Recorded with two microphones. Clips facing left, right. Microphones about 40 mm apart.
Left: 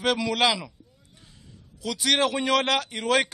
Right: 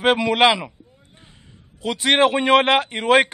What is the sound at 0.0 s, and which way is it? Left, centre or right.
A man's voice, right.